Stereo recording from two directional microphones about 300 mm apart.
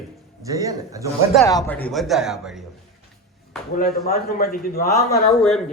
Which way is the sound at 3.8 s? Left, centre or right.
Left.